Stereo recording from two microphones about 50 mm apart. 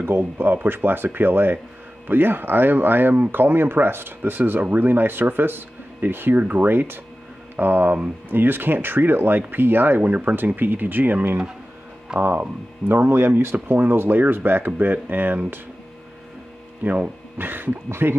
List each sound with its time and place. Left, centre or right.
0.0 s speech: right
13.0 s speech: right
16.8 s speech: right
17.5 s speech: right